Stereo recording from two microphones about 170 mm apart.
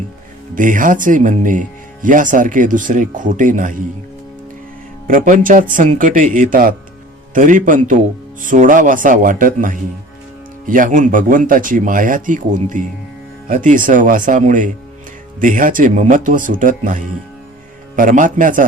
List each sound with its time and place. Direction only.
0.5 s speech: 50° right (ahead or behind)
5.0 s speech: 50° right (ahead or behind)